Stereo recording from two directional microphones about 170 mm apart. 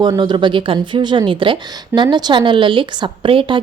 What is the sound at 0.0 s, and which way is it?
Speech, 25° right (ahead or behind).